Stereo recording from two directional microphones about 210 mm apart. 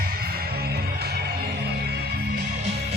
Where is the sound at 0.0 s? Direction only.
45° right (ahead or behind).